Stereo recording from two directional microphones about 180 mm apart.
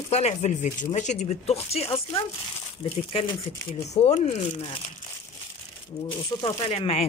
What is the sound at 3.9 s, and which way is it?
Speech, 40° left (ahead or behind).